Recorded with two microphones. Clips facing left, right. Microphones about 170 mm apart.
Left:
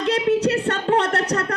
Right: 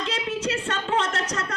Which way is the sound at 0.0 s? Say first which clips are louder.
Left 9 dB; 60° left (ahead or behind).